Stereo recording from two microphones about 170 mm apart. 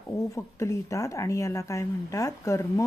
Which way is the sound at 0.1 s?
20° left (ahead or behind).